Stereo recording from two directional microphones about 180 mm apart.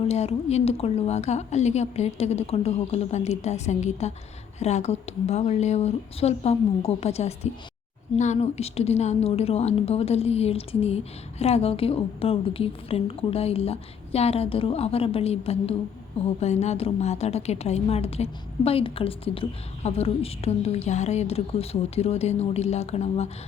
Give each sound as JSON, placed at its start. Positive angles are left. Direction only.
{"t": 0.0, "sound": "a woman's voice", "side_deg": 35}